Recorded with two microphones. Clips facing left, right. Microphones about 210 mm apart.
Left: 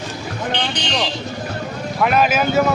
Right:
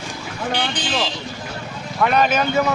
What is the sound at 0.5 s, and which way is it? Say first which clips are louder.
Speech: right 1 dB; 5° right (ahead or behind).